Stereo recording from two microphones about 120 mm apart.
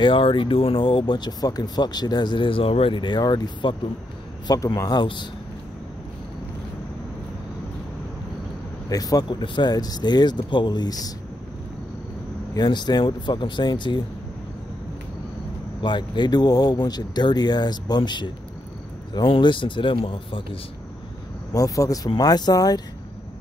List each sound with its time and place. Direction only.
0.0 s speech: 45° left (ahead or behind)
8.8 s speech: 30° left (ahead or behind)
12.5 s speech: 35° left (ahead or behind)
15.8 s speech: 40° left (ahead or behind)
21.5 s speech: 30° left (ahead or behind)